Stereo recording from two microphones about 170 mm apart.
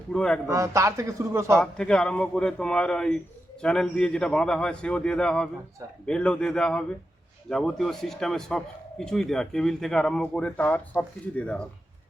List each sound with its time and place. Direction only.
0.1 s speech: 5° left (ahead or behind)
0.4 s speech: 15° right (ahead or behind)
1.5 s speech: 5° left (ahead or behind)